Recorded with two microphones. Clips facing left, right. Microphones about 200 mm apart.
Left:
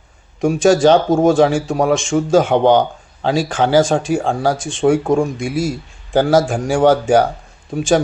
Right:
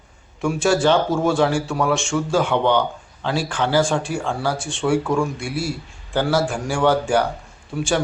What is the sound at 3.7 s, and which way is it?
Speech, 90° left.